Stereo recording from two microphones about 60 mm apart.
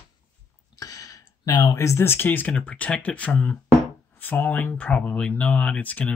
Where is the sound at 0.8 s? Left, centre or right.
Left.